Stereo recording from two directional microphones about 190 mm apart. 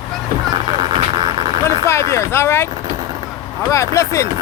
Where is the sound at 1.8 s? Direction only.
15° left (ahead or behind).